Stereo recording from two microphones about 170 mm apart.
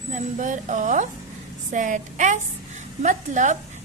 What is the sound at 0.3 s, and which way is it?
A woman's voice, 50° right (ahead or behind).